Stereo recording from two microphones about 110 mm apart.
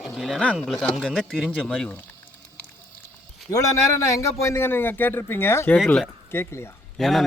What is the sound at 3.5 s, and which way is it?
A man's voice, 25° left (ahead or behind).